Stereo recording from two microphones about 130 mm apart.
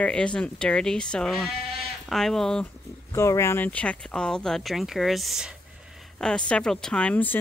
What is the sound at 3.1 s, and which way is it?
Speech, 20° left (ahead or behind).